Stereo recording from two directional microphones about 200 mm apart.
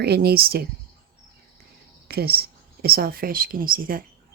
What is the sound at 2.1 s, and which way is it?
A woman's voice, 50° right (ahead or behind).